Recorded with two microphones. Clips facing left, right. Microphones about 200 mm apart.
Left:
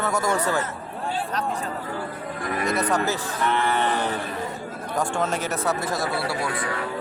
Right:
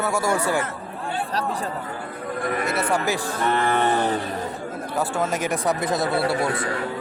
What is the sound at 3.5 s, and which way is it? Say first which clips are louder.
Cattle: right 2 dB; 50° right (ahead or behind).